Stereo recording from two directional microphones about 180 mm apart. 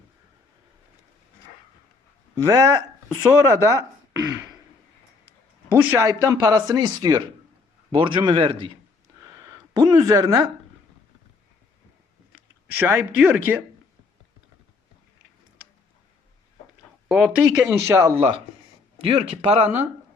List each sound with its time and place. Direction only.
2.3 s speech: 20° right (ahead or behind)
5.7 s speech: 15° right (ahead or behind)
12.7 s speech: 10° right (ahead or behind)
17.1 s speech: 5° right (ahead or behind)
19.0 s speech: 35° right (ahead or behind)